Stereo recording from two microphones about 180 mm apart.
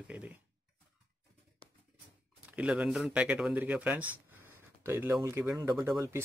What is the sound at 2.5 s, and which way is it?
Speech, 5° right (ahead or behind).